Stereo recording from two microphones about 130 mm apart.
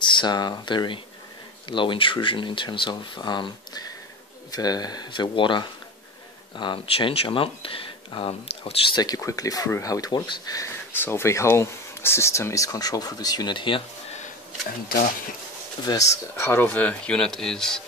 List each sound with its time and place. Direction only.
0.0 s speech: 35° left (ahead or behind)
8.9 s speech: 30° left (ahead or behind)
10.9 s speech: 15° left (ahead or behind); by 13.8 s 40° left (ahead or behind)
15.8 s speech: 30° left (ahead or behind); by 17.8 s 5° left (ahead or behind)